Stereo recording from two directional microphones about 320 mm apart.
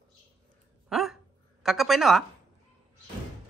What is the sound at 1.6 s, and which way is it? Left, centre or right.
Speech, centre.